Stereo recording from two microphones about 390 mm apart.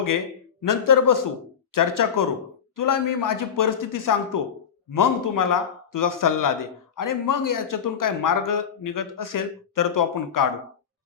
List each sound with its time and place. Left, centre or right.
0.6 s speech: left